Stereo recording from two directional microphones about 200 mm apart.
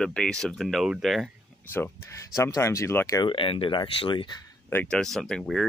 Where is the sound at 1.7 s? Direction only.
10° left (ahead or behind).